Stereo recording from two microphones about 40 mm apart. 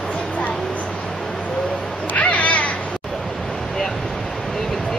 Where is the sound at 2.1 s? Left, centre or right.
Left.